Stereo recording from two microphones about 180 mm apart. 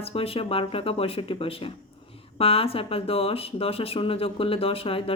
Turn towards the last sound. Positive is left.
turn(degrees=30)  # may be behind; listen again after turning